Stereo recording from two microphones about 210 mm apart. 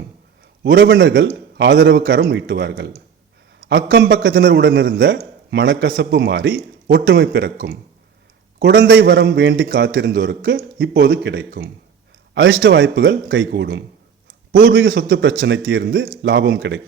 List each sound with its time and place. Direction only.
0.6 s a man's voice: 55° right (ahead or behind)